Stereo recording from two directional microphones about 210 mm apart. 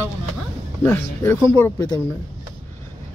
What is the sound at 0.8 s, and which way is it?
Speech, 10° left (ahead or behind).